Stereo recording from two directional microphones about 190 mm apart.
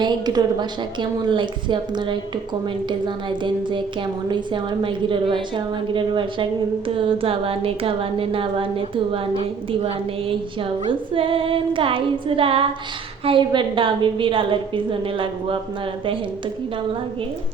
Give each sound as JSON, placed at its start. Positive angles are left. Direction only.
{"t": 0.0, "sound": "a woman's voice", "side_deg": -20}
{"t": 3.2, "sound": "a woman's voice", "side_deg": -25}